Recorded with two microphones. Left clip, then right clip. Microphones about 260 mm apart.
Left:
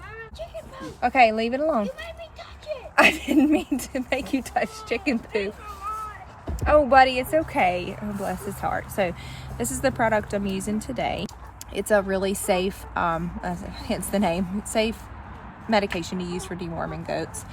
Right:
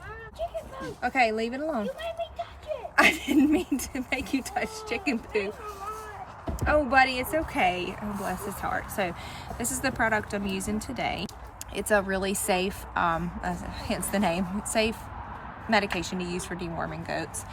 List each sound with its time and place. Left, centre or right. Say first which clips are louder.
1.0 s speech: left 6 dB; centre
2.9 s speech: left 3 dB; centre
6.6 s a woman's voice: left 6 dB; centre